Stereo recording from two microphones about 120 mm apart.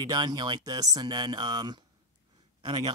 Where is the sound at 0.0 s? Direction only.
35° right (ahead or behind).